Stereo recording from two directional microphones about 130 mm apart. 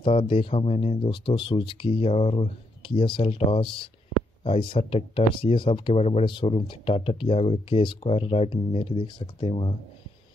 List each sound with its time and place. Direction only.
0.0 s speech: 45° left (ahead or behind)